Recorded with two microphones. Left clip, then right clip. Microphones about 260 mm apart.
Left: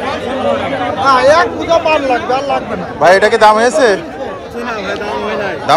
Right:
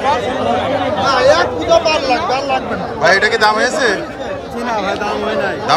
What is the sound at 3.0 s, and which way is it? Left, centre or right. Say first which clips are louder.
Speech: left 5 dB; centre.